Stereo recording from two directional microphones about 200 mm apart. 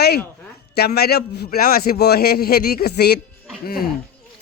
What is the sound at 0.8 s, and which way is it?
A man's voice, 50° left (ahead or behind).